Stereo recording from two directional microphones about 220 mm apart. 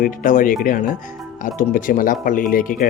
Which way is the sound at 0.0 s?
35° left (ahead or behind).